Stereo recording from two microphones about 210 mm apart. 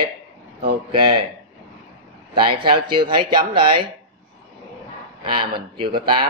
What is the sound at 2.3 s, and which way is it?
Speech, 20° right (ahead or behind).